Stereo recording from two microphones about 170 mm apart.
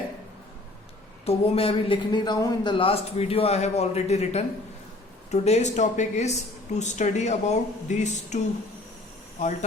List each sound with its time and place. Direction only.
1.2 s speech: 35° left (ahead or behind)
9.4 s speech: 45° left (ahead or behind)